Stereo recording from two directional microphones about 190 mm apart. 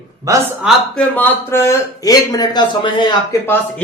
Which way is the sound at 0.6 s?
5° left (ahead or behind).